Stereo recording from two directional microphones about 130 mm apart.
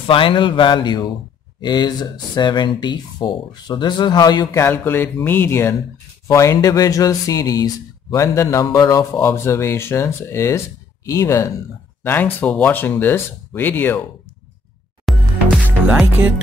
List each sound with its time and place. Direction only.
0.0 s speech: 40° left (ahead or behind); by 14.0 s 15° left (ahead or behind)
15.1 s music: centre (ahead or behind)
15.9 s music: 15° right (ahead or behind)